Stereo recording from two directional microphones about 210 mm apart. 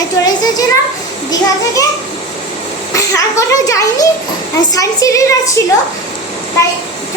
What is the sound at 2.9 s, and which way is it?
A child's voice, 15° left (ahead or behind).